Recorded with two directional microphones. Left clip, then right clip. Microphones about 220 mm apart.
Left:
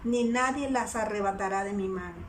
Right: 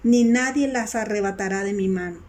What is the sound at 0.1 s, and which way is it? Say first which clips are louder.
A woman's voice: right 7 dB; 25° right (ahead or behind).